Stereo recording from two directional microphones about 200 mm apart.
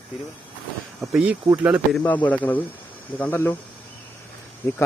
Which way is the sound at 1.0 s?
5° right (ahead or behind).